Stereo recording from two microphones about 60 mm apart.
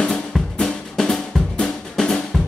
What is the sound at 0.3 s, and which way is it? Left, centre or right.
Drum, centre.